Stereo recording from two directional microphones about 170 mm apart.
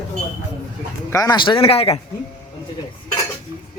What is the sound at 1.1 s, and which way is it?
Speech, 20° left (ahead or behind).